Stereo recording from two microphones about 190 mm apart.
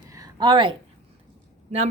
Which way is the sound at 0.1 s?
20° right (ahead or behind).